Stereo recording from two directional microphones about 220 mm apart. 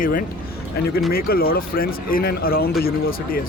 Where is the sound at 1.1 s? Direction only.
40° left (ahead or behind).